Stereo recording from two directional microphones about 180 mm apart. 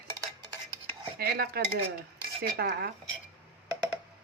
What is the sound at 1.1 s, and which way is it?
Speech, 55° right (ahead or behind).